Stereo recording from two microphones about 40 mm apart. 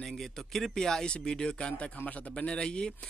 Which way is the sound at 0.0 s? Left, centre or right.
Centre.